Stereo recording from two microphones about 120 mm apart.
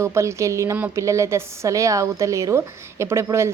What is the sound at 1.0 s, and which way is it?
A woman's voice, 25° right (ahead or behind).